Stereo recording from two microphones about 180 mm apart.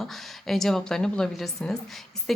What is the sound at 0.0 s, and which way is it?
A woman's voice, centre (ahead or behind).